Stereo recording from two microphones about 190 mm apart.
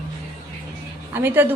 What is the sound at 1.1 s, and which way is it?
Speech, 10° right (ahead or behind).